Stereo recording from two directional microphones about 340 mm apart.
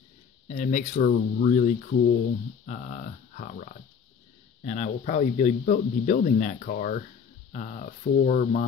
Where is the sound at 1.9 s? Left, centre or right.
Left.